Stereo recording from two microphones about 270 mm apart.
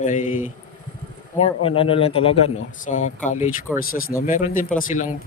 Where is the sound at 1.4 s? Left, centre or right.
Left.